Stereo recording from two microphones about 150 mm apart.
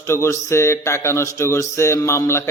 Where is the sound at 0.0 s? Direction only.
20° left (ahead or behind).